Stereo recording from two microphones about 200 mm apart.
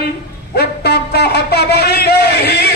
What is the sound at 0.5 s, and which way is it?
Music, 55° left (ahead or behind).